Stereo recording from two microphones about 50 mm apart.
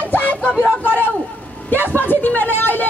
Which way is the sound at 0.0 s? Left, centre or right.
Left.